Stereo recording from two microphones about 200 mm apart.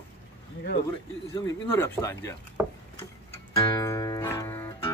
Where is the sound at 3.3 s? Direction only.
15° left (ahead or behind).